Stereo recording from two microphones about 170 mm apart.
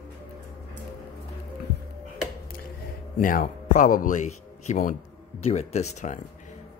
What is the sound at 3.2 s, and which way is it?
Speech, 55° left (ahead or behind).